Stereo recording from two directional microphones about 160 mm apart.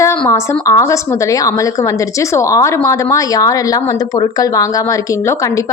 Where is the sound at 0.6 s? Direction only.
20° left (ahead or behind).